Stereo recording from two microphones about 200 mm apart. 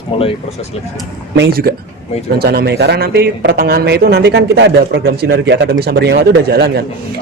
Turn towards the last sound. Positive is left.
turn(degrees=-55)  # may be behind; listen again after turning